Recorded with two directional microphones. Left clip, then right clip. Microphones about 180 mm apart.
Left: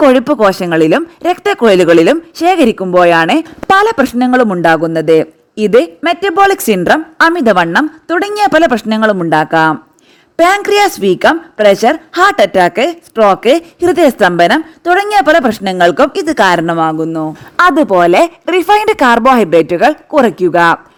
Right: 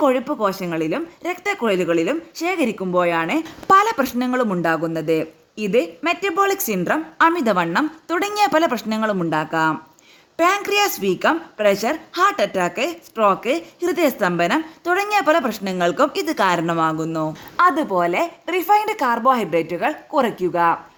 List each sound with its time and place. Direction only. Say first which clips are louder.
0.0 s speech: left 11 dB; 45° left (ahead or behind)
3.7 s a man's voice: left 6 dB; 35° left (ahead or behind)